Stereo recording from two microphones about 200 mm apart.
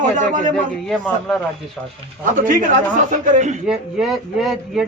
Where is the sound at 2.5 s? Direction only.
40° right (ahead or behind).